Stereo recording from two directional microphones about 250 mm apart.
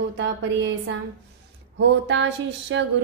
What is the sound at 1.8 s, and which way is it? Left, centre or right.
A woman's voice, right.